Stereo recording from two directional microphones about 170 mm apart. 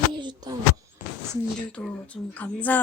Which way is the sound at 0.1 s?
25° right (ahead or behind).